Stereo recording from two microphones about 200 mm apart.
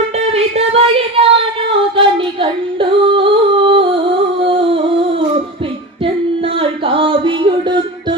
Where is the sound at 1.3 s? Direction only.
30° right (ahead or behind).